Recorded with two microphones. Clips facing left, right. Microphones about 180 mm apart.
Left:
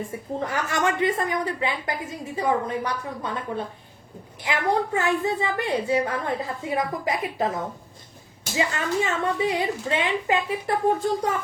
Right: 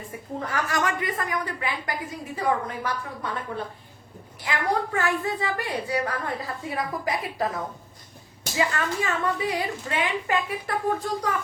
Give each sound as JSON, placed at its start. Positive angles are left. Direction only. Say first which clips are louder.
{"t": 0.0, "sound": "a woman's voice", "louder": "left 4 dB", "side_deg": 25}
{"t": 4.9, "sound": "a woman's voice", "louder": "left 3 dB", "side_deg": 20}